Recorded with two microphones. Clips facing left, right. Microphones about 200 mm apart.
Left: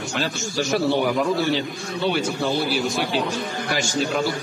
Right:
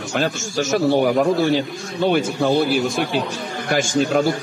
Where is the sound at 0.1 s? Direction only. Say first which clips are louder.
Right 6 dB; 50° right (ahead or behind).